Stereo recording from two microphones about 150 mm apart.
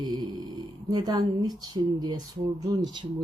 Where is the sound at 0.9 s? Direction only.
30° right (ahead or behind).